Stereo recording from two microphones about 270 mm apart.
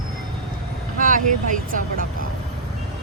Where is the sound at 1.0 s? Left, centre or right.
Right.